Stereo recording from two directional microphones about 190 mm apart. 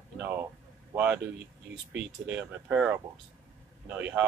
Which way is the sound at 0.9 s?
10° right (ahead or behind).